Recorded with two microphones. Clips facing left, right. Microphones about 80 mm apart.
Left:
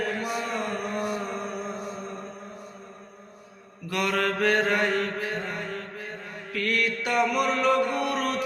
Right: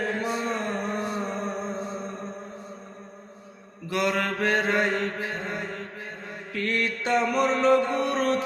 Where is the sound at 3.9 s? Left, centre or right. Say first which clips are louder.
Even; right.